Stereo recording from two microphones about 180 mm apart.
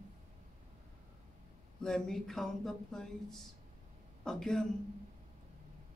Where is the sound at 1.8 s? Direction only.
5° left (ahead or behind).